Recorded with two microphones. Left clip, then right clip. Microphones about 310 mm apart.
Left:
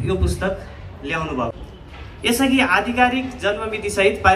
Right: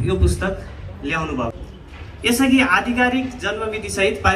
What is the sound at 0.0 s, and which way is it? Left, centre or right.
A man's voice, left.